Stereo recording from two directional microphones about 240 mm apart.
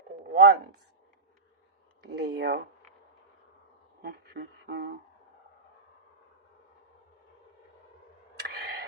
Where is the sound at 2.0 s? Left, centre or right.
Right.